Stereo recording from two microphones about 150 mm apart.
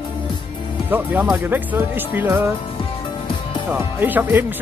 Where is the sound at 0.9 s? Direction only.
10° right (ahead or behind).